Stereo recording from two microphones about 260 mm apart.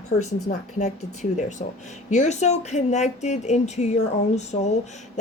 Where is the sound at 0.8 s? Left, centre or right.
Left.